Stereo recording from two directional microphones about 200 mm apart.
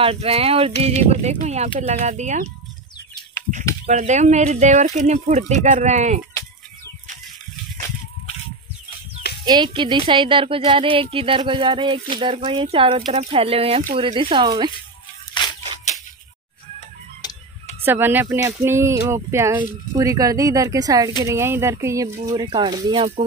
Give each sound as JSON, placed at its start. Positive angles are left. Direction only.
{"t": 0.0, "sound": "speech", "side_deg": -30}
{"t": 3.8, "sound": "speech", "side_deg": -35}
{"t": 9.4, "sound": "speech", "side_deg": -20}
{"t": 17.8, "sound": "speech", "side_deg": -10}